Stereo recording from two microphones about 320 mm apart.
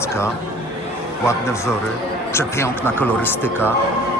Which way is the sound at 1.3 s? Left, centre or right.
Centre.